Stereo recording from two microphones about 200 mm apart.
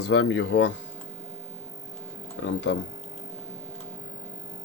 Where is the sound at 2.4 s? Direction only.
70° left (ahead or behind).